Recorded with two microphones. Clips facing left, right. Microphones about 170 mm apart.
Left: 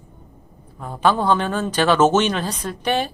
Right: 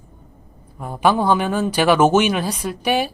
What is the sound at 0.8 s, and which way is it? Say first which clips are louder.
Speech: right 1 dB; 15° right (ahead or behind).